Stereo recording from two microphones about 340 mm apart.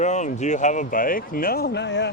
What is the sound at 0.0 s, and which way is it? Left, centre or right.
Speech, left.